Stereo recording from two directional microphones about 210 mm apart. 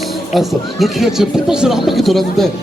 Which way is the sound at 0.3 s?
Centre (ahead or behind).